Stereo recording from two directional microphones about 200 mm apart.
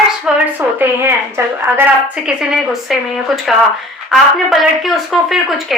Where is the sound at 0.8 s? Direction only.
10° right (ahead or behind).